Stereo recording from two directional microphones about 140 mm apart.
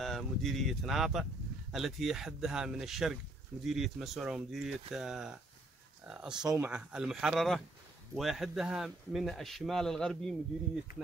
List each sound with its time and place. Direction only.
0.0 s speech: centre (ahead or behind)